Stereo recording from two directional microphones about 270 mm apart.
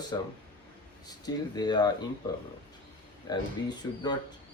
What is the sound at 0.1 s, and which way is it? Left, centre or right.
Speech, centre.